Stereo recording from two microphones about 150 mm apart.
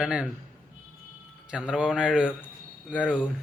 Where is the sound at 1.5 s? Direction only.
5° right (ahead or behind).